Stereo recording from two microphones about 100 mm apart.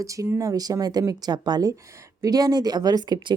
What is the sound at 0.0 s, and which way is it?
Speech, 35° right (ahead or behind).